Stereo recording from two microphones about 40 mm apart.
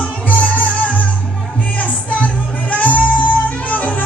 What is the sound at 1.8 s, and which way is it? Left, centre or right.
Music, left.